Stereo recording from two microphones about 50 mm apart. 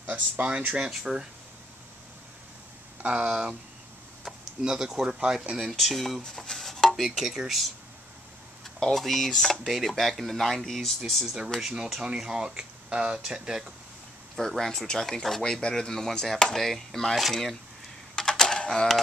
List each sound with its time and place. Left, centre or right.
0.0 s speech: right; by 1.2 s centre
3.0 s speech: right
3.3 s speech: centre
5.6 s speech: centre
6.4 s chopping: centre
7.2 s speech: centre
8.9 s speech: centre
11.6 s speech: centre
14.6 s speech: centre
18.1 s typing: centre